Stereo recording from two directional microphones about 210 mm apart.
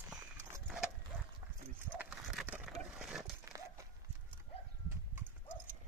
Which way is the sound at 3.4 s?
15° right (ahead or behind).